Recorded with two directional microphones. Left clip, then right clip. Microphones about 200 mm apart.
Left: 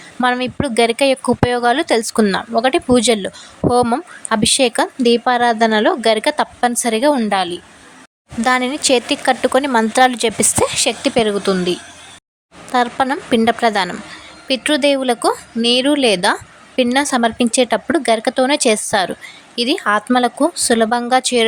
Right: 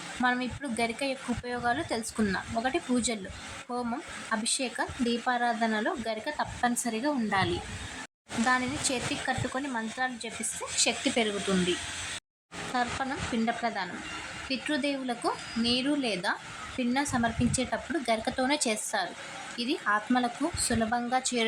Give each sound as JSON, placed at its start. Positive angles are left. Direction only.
{"t": 0.2, "sound": "speech", "side_deg": 45}
{"t": 10.8, "sound": "speech", "side_deg": 35}
{"t": 12.7, "sound": "a woman's voice", "side_deg": 55}